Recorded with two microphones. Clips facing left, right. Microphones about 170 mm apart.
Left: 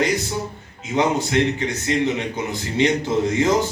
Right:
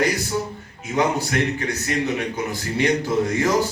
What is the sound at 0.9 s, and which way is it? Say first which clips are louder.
A man's voice: left 2 dB; 20° left (ahead or behind).